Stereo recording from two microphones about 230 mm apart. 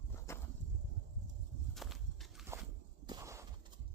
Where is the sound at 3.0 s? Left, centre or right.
Centre.